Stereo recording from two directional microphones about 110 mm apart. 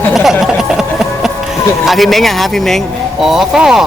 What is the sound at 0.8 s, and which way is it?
Music, 5° right (ahead or behind).